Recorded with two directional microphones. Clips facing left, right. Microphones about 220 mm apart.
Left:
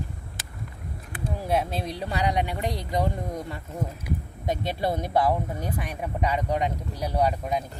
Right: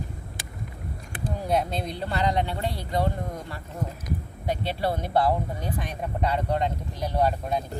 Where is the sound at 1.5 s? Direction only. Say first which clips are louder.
Even; 5° left (ahead or behind).